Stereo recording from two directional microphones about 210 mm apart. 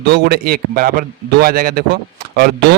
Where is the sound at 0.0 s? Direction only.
50° right (ahead or behind).